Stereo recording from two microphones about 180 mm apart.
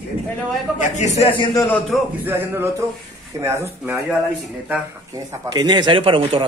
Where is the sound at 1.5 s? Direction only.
10° left (ahead or behind).